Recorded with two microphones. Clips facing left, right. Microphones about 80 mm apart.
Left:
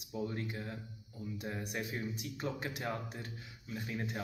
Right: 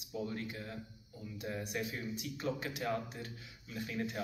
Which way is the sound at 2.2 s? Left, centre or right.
Left.